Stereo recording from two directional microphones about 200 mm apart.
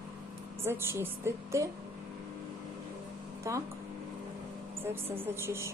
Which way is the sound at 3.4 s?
15° right (ahead or behind).